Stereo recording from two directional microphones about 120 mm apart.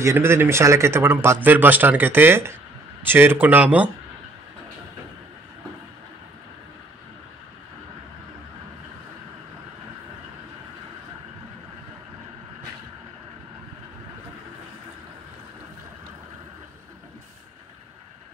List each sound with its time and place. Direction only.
0.0 s a man's voice: 20° right (ahead or behind)